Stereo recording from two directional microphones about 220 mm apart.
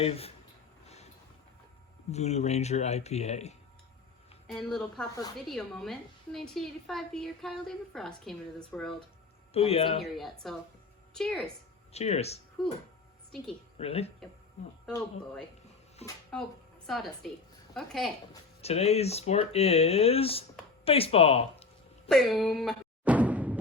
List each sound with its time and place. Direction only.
0.0 s speech: 25° left (ahead or behind)
2.0 s speech: 30° left (ahead or behind)
4.4 s a woman's voice: centre (ahead or behind)
9.5 s speech: 25° left (ahead or behind)
10.0 s a woman's voice: centre (ahead or behind)
11.9 s speech: 30° left (ahead or behind)
12.6 s a woman's voice: centre (ahead or behind)
13.7 s speech: 30° left (ahead or behind)
16.0 s speech: 30° left (ahead or behind)
16.8 s a woman's voice: centre (ahead or behind)
18.6 s speech: 30° left (ahead or behind)
20.8 s a sound: 25° left (ahead or behind)
22.1 s a sound: centre (ahead or behind)